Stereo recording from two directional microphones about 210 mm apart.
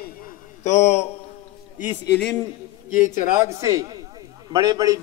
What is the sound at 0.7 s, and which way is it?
Speech, 35° left (ahead or behind).